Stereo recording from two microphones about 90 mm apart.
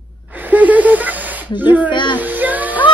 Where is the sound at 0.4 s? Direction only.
20° right (ahead or behind).